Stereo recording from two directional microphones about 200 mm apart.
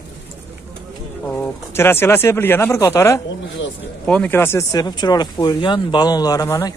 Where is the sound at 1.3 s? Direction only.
10° left (ahead or behind).